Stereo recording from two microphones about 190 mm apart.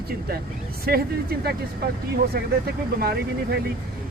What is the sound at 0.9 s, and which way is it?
Speech, 55° right (ahead or behind).